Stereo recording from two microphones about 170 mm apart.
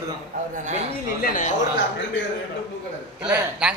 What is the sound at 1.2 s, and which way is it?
Speech, 55° left (ahead or behind).